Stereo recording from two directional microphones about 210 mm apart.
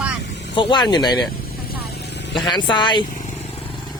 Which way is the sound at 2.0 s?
55° left (ahead or behind).